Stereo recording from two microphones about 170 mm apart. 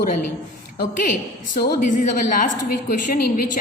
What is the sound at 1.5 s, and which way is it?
A woman's voice, 60° left (ahead or behind).